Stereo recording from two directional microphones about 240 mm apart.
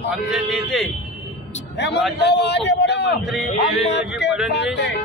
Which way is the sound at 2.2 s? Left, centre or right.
Left.